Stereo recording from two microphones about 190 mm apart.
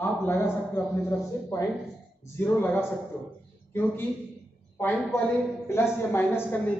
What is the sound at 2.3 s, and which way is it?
Speech, 10° left (ahead or behind).